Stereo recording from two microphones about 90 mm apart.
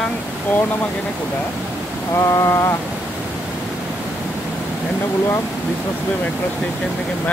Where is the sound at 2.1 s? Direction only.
35° left (ahead or behind).